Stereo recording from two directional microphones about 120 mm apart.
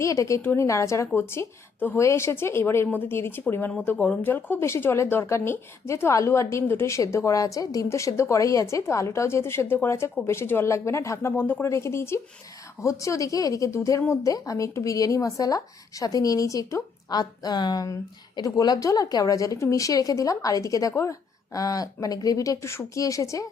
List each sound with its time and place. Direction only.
0.0 s speech: 25° left (ahead or behind)